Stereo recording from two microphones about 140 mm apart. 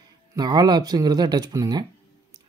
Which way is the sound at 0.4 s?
30° right (ahead or behind).